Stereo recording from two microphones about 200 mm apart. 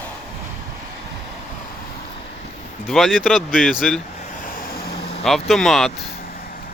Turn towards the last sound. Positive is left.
turn(degrees=0)  # may be behind; listen again after turning